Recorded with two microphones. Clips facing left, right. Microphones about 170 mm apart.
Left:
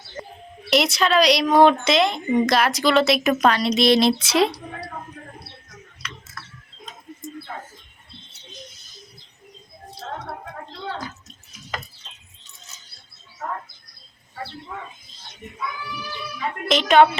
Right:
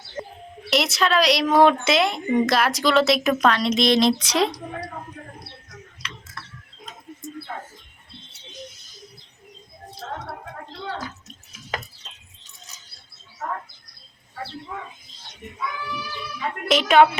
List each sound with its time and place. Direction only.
0.7 s a woman's voice: centre (ahead or behind)
16.6 s a woman's voice: 5° right (ahead or behind)